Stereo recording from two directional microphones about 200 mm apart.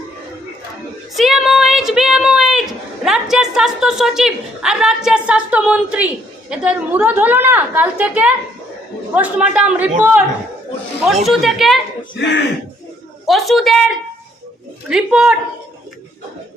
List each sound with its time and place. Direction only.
1.1 s a sound: centre (ahead or behind)
6.5 s a woman's voice: 5° right (ahead or behind)
11.3 s speech: centre (ahead or behind)
12.1 s speech: 60° left (ahead or behind)
13.2 s speech: centre (ahead or behind)